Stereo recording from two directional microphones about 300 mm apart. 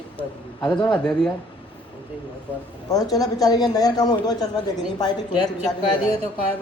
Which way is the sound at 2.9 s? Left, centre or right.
Centre.